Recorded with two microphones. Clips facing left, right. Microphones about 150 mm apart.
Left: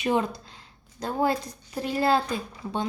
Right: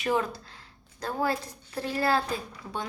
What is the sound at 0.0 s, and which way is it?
A woman's voice, 20° left (ahead or behind).